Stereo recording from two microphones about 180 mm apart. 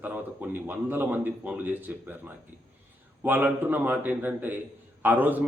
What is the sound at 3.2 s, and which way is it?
A man's voice, 10° right (ahead or behind).